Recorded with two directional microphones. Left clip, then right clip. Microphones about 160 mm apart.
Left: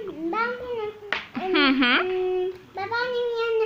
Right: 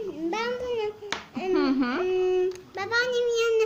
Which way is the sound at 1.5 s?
10° right (ahead or behind).